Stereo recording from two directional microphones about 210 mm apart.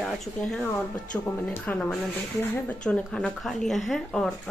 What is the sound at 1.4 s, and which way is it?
Speech, 5° left (ahead or behind).